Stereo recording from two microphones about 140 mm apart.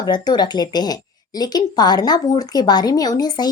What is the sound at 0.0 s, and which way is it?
A woman's voice, 30° left (ahead or behind).